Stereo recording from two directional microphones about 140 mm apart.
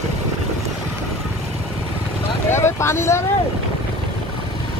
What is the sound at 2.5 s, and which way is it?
Speech, 20° left (ahead or behind).